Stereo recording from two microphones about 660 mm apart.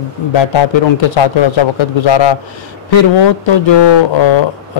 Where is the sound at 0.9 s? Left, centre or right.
Left.